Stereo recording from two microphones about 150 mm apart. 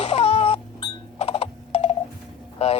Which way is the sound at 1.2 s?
40° left (ahead or behind).